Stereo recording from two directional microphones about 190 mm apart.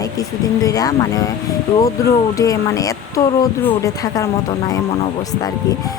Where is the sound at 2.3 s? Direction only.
15° left (ahead or behind).